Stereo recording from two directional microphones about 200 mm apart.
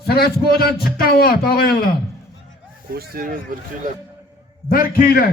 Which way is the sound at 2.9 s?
50° right (ahead or behind).